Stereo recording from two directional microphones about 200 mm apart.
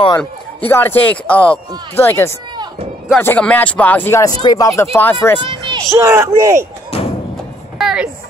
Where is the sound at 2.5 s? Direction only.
20° right (ahead or behind).